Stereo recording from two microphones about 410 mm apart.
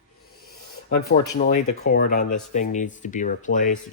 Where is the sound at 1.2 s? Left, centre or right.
Centre.